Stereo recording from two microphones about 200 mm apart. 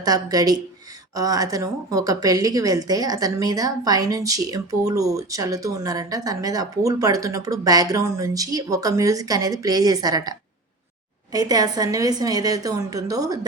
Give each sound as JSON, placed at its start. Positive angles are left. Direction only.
{"t": 0.0, "sound": "a woman's voice", "side_deg": -20}